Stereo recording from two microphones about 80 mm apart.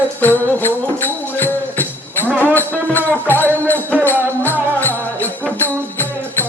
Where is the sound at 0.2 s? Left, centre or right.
Left.